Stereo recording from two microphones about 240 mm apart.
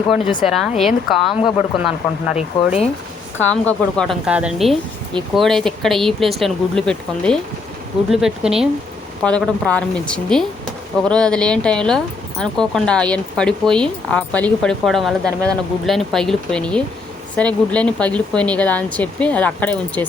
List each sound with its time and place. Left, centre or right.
0.8 s speech: centre